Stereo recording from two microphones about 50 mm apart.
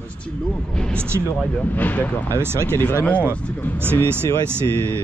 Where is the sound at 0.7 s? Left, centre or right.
Centre.